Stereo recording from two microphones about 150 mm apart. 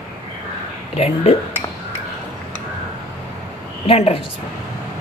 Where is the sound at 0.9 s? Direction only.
45° left (ahead or behind).